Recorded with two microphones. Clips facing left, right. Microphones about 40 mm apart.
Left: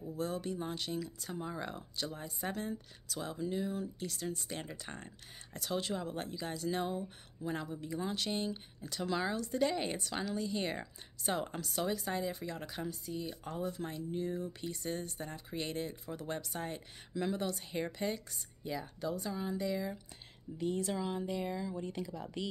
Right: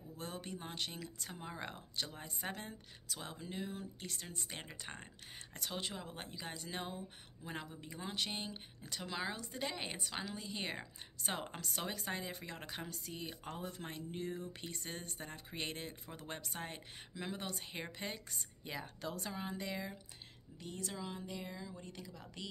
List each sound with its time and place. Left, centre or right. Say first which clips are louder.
0.2 s speech: left 8 dB; right
1.3 s speech: left 7 dB; right
5.7 s speech: left 8 dB; centre
8.0 s speech: left 4 dB; centre; by 12.9 s right
12.9 s speech: left 5 dB; right
18.3 s speech: left 5 dB; right
18.9 s a woman's voice: left 7 dB; right
19.3 s speech: left 6 dB; right
20.5 s speech: left 10 dB; centre